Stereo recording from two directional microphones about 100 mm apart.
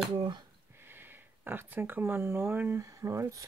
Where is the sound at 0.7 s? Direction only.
20° right (ahead or behind).